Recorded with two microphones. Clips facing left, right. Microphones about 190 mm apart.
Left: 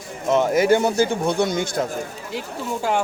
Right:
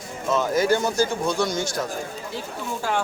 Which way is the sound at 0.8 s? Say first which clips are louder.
Left 3 dB; 60° left (ahead or behind).